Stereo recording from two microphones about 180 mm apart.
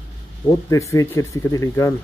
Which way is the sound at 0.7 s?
15° left (ahead or behind).